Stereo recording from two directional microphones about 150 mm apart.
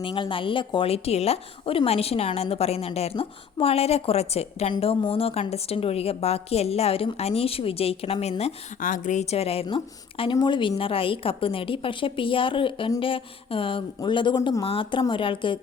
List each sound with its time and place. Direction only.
0.0 s a woman's voice: 35° left (ahead or behind)
8.8 s a woman's voice: 60° left (ahead or behind); by 15.5 s 35° left (ahead or behind)